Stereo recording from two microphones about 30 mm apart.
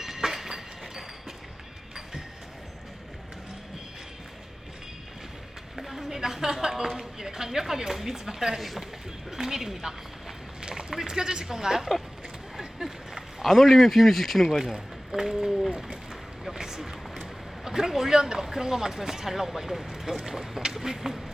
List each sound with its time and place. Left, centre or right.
0.0 s train: centre
5.7 s a sound: centre
6.1 s speech: centre
10.6 s rowboat: right
10.9 s speech: right
12.5 s a sound: centre
14.5 s speech: centre
16.4 s a sound: centre
17.9 s speech: centre